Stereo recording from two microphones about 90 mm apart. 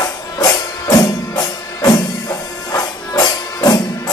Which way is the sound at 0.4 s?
40° left (ahead or behind).